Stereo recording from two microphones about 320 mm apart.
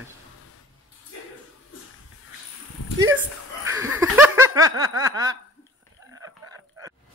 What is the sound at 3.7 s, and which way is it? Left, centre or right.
Snicker, centre.